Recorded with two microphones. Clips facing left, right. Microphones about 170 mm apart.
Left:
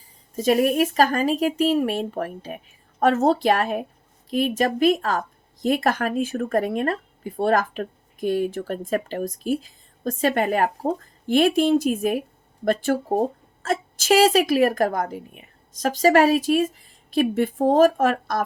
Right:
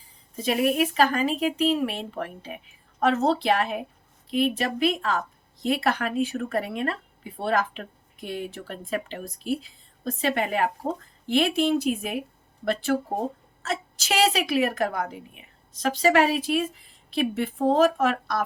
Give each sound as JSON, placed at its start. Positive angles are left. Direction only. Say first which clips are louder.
{"t": 0.3, "sound": "a woman's voice", "louder": "left 4 dB", "side_deg": 40}